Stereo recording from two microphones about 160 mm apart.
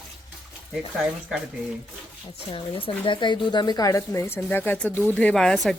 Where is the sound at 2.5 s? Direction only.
35° left (ahead or behind).